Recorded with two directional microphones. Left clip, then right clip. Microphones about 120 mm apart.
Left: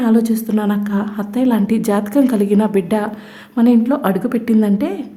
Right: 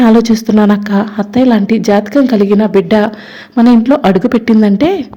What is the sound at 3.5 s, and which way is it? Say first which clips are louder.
Speech: right 6 dB; 35° right (ahead or behind).